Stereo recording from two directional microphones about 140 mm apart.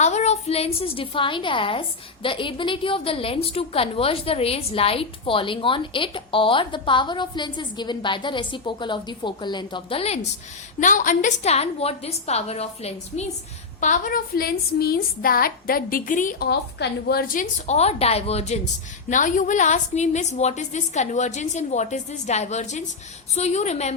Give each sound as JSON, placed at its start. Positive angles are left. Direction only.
{"t": 0.0, "sound": "a woman's voice", "side_deg": 55}
{"t": 10.8, "sound": "a woman's voice", "side_deg": 70}
{"t": 13.8, "sound": "a woman's voice", "side_deg": 70}
{"t": 17.2, "sound": "a woman's voice", "side_deg": 90}
{"t": 17.7, "sound": "a woman's voice", "side_deg": 50}
{"t": 19.1, "sound": "a woman's voice", "side_deg": 65}